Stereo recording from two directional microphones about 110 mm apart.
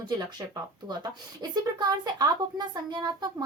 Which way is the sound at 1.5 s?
40° right (ahead or behind).